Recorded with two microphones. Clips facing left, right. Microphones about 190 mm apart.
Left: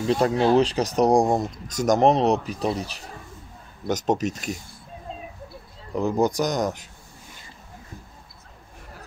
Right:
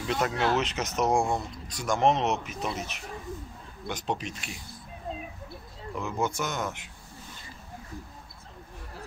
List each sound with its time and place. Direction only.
0.0 s speech: 30° left (ahead or behind)
5.9 s speech: 35° left (ahead or behind)